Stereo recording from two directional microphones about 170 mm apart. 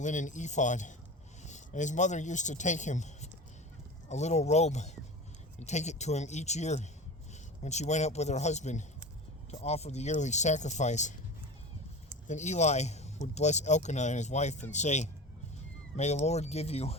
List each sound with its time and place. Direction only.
0.0 s speech: 45° left (ahead or behind)
12.3 s speech: 45° left (ahead or behind)